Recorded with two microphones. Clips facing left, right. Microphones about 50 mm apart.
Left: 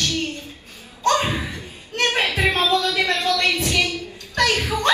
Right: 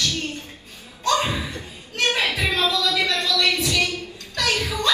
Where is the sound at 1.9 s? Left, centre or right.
Left.